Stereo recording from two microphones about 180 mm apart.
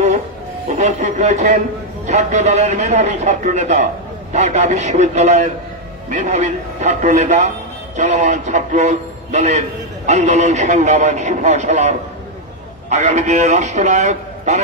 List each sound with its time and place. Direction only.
0.7 s a man's voice: 40° right (ahead or behind)
12.9 s a man's voice: 40° right (ahead or behind)